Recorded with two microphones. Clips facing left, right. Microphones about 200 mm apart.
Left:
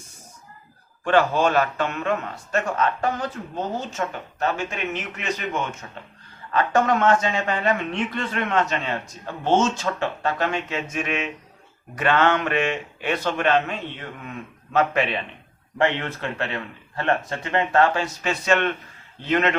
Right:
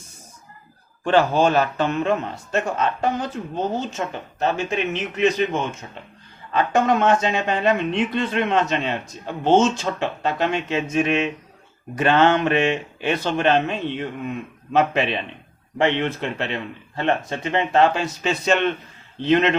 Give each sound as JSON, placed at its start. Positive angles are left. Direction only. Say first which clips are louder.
{"t": 1.0, "sound": "speech", "louder": "right 2 dB", "side_deg": -30}
{"t": 6.5, "sound": "speech", "louder": "right 1 dB", "side_deg": -20}